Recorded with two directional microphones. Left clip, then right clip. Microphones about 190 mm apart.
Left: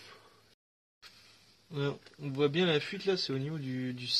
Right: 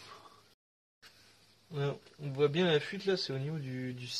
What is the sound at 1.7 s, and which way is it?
Speech, 40° left (ahead or behind).